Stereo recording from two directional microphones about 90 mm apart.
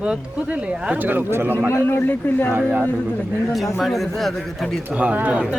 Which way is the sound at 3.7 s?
Centre (ahead or behind).